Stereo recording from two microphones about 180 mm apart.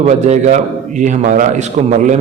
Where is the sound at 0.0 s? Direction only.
40° right (ahead or behind).